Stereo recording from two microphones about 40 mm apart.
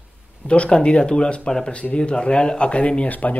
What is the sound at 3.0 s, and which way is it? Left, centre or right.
Speech, left.